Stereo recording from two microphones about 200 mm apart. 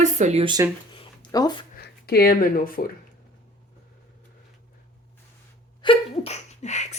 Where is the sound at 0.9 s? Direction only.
20° left (ahead or behind).